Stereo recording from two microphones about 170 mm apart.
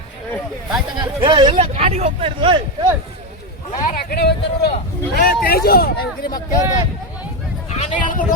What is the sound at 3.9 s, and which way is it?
Speech, 65° left (ahead or behind).